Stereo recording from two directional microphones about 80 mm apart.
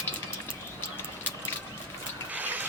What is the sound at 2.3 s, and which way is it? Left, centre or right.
Mechanisms, right.